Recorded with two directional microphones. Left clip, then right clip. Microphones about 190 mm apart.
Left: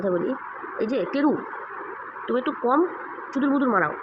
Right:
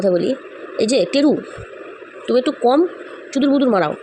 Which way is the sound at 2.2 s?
45° right (ahead or behind).